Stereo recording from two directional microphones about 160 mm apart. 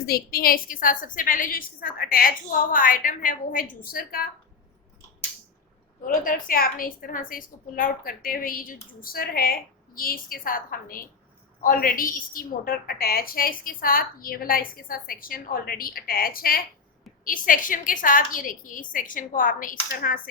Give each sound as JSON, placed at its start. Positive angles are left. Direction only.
{"t": 0.0, "sound": "a woman's voice", "side_deg": 70}
{"t": 6.2, "sound": "a woman's voice", "side_deg": 60}